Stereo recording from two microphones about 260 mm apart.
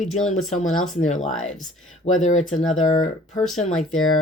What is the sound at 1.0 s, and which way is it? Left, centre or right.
Speech, left.